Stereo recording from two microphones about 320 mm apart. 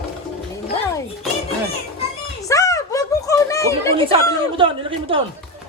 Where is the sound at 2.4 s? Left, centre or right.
Centre.